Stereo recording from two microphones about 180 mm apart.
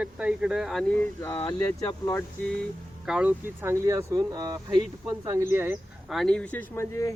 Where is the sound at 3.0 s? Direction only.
5° right (ahead or behind).